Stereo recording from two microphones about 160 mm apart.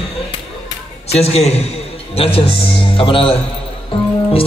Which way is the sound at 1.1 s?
40° left (ahead or behind).